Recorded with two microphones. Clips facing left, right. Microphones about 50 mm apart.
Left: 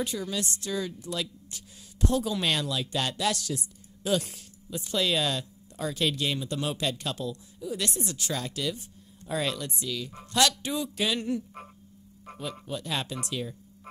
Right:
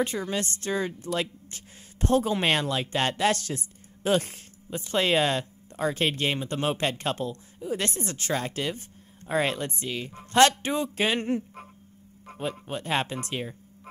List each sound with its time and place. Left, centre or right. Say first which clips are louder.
0.0 s a woman's voice: right 4 dB; right
12.6 s a woman's voice: right 4 dB; right